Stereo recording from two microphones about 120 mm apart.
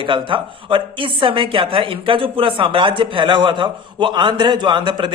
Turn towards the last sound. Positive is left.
turn(degrees=-40)  # may be behind; listen again after turning